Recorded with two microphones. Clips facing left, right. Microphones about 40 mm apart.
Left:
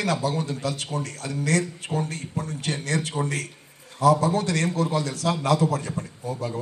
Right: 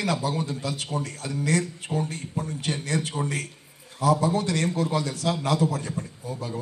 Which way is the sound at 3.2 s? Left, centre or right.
Centre.